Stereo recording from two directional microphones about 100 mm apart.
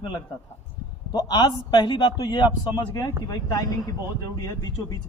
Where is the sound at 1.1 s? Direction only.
45° left (ahead or behind).